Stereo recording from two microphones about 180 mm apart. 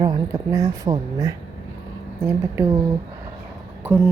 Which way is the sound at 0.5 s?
20° right (ahead or behind).